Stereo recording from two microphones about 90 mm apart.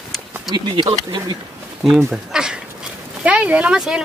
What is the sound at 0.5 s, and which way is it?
Speech, 75° right (ahead or behind).